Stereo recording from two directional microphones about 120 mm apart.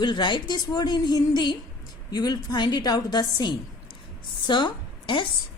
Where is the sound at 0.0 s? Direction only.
40° left (ahead or behind).